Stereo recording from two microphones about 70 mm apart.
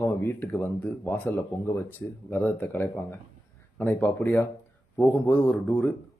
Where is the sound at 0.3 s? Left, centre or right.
Left.